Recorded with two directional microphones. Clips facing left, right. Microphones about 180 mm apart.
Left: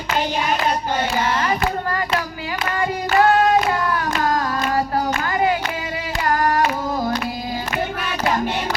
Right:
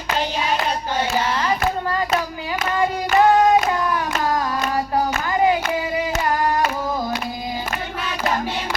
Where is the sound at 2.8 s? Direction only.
15° right (ahead or behind).